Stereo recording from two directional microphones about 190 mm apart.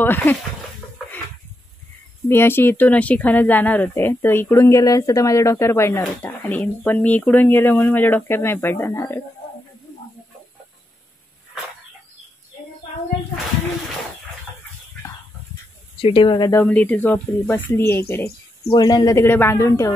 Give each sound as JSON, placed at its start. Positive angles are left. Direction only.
{"t": 0.0, "sound": "speech", "side_deg": 10}
{"t": 2.2, "sound": "speech", "side_deg": 10}
{"t": 16.0, "sound": "speech", "side_deg": 25}
{"t": 16.6, "sound": "speech", "side_deg": 5}